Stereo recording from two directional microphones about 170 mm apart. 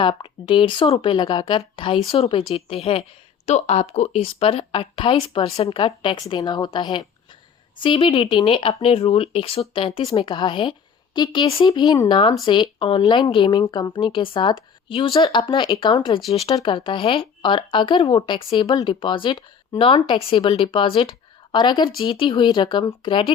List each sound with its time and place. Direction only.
0.0 s speech: 30° left (ahead or behind)